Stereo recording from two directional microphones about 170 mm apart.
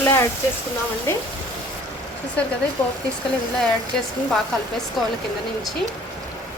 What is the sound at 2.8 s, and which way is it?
Speech, 15° left (ahead or behind).